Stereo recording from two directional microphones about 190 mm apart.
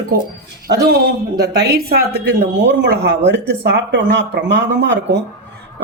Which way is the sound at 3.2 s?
65° right (ahead or behind).